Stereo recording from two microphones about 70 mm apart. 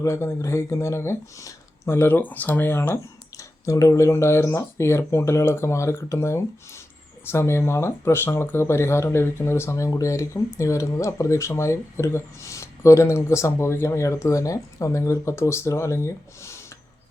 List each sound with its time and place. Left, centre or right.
0.0 s speech: left